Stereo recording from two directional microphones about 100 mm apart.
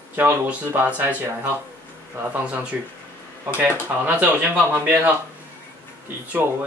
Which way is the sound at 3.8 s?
15° right (ahead or behind).